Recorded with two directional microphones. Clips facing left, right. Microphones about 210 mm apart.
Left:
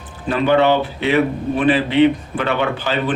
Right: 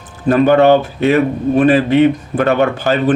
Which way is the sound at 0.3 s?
45° right (ahead or behind).